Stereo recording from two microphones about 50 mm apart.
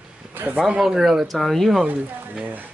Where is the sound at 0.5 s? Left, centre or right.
Centre.